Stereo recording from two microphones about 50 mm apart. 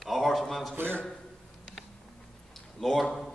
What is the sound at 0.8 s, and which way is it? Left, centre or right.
Speech, right.